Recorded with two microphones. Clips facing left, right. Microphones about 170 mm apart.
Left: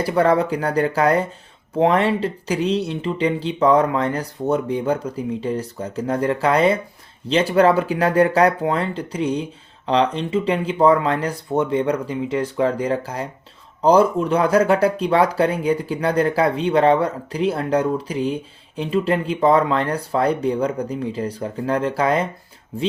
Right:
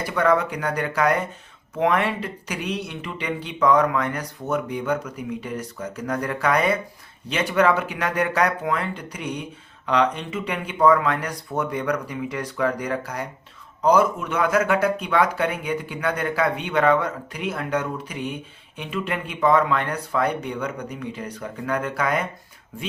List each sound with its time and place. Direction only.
0.0 s speech: 30° left (ahead or behind)